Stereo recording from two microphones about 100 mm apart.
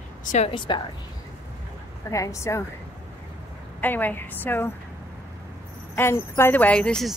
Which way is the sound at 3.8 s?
20° left (ahead or behind).